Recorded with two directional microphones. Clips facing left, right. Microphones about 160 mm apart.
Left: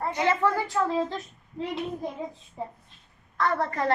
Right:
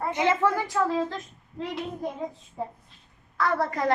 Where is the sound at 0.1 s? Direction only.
15° right (ahead or behind).